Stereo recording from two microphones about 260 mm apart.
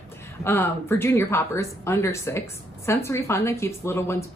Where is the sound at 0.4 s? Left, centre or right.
Centre.